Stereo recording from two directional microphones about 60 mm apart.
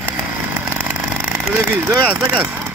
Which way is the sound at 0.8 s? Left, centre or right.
Right.